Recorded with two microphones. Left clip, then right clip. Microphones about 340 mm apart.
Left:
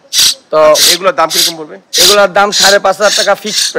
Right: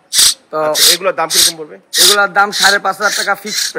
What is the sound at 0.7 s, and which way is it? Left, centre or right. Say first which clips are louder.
A man's voice: left 4 dB; centre.